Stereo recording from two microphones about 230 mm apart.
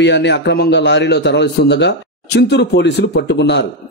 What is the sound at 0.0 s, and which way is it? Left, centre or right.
A man's voice, left.